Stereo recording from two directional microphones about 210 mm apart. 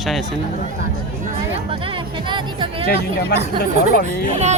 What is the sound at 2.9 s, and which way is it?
Speech, 50° left (ahead or behind).